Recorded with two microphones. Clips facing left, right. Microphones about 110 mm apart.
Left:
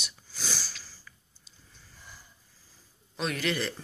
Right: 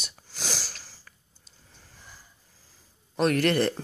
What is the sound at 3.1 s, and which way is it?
Speech, 55° right (ahead or behind).